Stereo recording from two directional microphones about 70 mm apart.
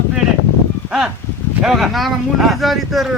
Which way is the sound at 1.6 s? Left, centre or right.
Centre.